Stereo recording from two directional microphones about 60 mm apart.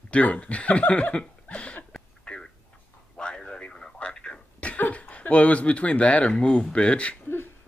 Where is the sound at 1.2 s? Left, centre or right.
Left.